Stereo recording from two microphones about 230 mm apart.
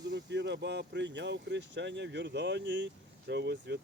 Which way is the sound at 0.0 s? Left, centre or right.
Right.